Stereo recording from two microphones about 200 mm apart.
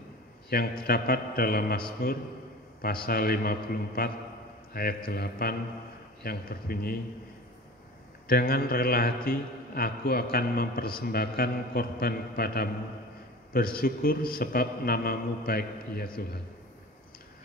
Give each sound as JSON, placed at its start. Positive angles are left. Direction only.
{"t": 0.5, "sound": "a man's voice", "side_deg": 50}
{"t": 8.3, "sound": "a man's voice", "side_deg": 50}
{"t": 13.7, "sound": "a man's voice", "side_deg": 45}